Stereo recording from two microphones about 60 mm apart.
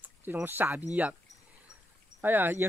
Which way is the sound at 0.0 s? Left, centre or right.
Right.